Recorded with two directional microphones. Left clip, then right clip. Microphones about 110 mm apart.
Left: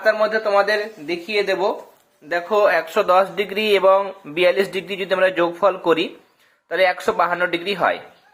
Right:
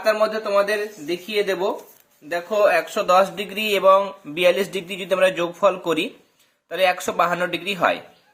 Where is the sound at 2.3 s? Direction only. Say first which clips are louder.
Left 1 dB; 10° right (ahead or behind).